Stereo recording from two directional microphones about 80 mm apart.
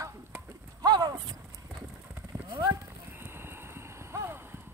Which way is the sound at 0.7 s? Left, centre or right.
Right.